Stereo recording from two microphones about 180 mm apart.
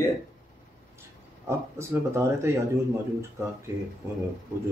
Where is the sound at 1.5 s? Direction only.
15° right (ahead or behind).